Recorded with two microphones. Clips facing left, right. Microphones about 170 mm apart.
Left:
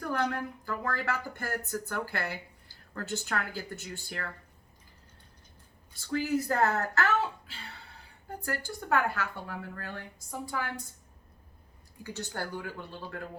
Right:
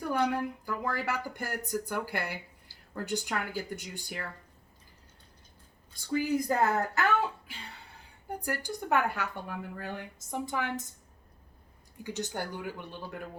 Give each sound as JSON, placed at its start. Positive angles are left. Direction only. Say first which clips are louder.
{"t": 0.0, "sound": "a woman's voice", "louder": "right 2 dB", "side_deg": -15}
{"t": 6.1, "sound": "a woman's voice", "louder": "right 1 dB", "side_deg": -15}
{"t": 12.0, "sound": "a woman's voice", "louder": "right 2 dB", "side_deg": -20}